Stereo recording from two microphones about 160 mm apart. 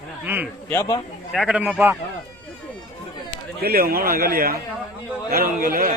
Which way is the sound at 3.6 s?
70° right (ahead or behind).